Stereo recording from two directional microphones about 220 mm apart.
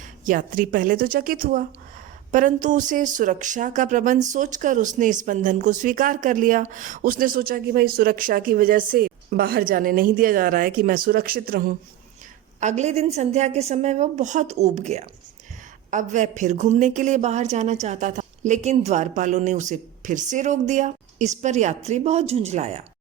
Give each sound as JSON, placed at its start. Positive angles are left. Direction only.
{"t": 0.3, "sound": "speech", "side_deg": -40}
{"t": 12.5, "sound": "speech", "side_deg": -30}